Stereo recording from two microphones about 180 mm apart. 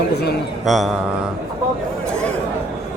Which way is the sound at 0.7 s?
Centre (ahead or behind).